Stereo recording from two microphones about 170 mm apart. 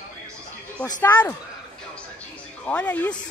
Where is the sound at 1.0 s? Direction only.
10° left (ahead or behind).